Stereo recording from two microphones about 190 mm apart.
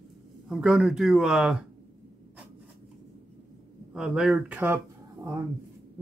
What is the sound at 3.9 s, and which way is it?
Speech, 5° right (ahead or behind).